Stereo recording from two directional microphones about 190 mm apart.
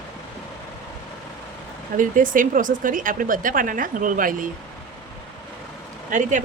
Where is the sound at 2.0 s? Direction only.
45° right (ahead or behind).